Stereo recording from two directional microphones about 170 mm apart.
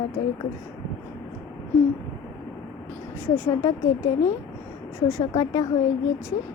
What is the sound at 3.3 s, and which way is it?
Speech, 15° left (ahead or behind).